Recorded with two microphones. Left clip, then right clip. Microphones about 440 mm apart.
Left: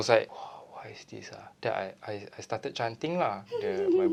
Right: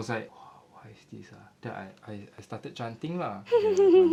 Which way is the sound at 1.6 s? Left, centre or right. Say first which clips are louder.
Left 9 dB; left.